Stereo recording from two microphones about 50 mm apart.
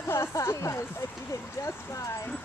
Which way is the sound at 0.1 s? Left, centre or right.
Left.